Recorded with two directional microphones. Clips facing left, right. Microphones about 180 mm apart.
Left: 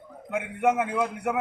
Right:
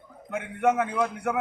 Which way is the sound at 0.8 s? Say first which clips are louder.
Even; 15° left (ahead or behind).